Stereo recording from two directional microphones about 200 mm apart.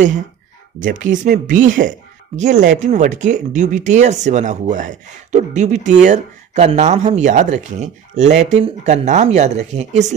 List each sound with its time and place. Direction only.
0.7 s speech: 40° right (ahead or behind)